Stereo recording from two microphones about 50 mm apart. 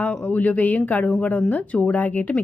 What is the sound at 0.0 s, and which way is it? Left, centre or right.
A woman's voice, left.